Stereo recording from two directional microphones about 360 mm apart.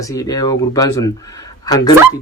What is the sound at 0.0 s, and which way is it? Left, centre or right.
A man's voice, centre.